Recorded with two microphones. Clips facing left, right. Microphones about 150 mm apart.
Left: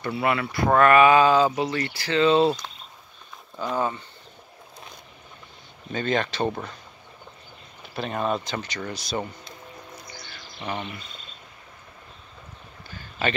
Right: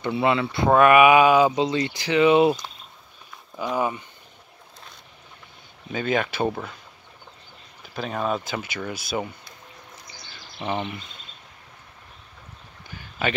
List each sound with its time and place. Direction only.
0.0 s speech: 20° right (ahead or behind)
5.9 s speech: 5° right (ahead or behind)
7.9 s speech: centre (ahead or behind)
10.6 s speech: 25° right (ahead or behind)
12.8 s a sound: 15° right (ahead or behind)